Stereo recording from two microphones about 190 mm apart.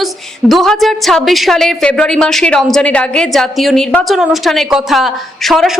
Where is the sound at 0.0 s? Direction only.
Centre (ahead or behind).